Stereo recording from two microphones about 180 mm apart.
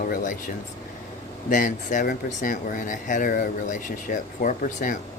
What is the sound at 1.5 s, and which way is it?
Speech, 45° left (ahead or behind).